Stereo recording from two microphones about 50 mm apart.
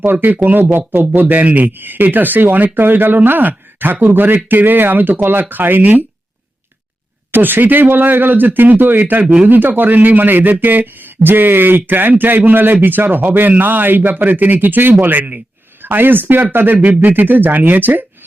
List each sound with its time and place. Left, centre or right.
0.0 s speech: right
7.3 s speech: right